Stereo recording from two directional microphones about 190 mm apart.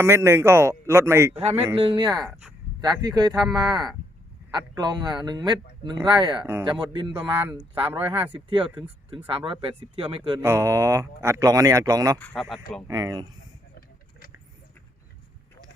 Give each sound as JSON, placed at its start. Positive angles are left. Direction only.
{"t": 0.0, "sound": "speech", "side_deg": -15}
{"t": 1.4, "sound": "speech", "side_deg": -30}
{"t": 6.4, "sound": "speech", "side_deg": -15}
{"t": 6.7, "sound": "speech", "side_deg": -25}
{"t": 10.4, "sound": "speech", "side_deg": -15}
{"t": 12.2, "sound": "speech", "side_deg": 5}
{"t": 12.9, "sound": "speech", "side_deg": -20}